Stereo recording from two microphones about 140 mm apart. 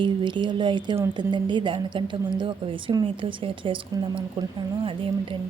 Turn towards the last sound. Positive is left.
turn(degrees=-40)  # may be behind; listen again after turning